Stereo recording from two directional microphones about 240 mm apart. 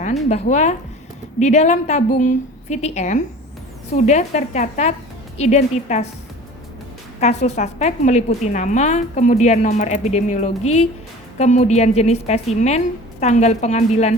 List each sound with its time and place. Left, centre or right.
0.3 s a woman's voice: left
7.2 s a woman's voice: left